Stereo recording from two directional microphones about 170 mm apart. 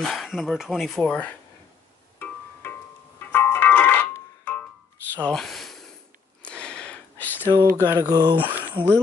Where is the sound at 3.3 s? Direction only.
10° left (ahead or behind).